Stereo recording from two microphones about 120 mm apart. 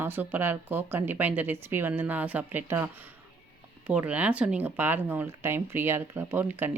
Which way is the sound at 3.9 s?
10° right (ahead or behind).